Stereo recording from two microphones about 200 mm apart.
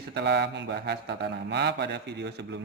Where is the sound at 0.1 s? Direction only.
55° right (ahead or behind).